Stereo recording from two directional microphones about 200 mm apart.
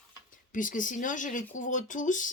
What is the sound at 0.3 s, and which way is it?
Speech, 40° left (ahead or behind).